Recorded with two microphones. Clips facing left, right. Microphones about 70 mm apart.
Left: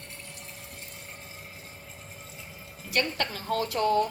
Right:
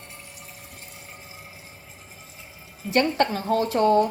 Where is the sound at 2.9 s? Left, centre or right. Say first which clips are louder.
Right 8 dB; right.